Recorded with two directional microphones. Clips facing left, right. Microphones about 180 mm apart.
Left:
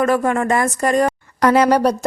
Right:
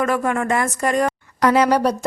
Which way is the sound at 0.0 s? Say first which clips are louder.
Left 3 dB; 35° left (ahead or behind).